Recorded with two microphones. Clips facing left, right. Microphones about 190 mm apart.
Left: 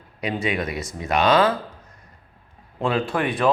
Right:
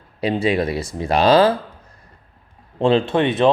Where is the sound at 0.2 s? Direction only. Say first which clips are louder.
Right 6 dB; 30° right (ahead or behind).